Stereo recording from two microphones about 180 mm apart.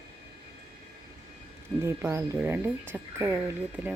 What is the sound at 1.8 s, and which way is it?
Speech, 15° right (ahead or behind).